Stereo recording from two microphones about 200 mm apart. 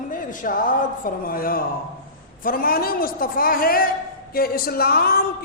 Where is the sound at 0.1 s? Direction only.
40° left (ahead or behind).